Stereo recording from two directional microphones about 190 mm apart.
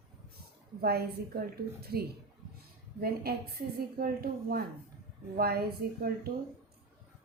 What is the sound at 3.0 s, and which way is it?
A woman's voice, 55° right (ahead or behind).